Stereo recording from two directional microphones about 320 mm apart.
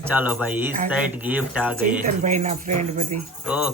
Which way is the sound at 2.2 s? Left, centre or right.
Right.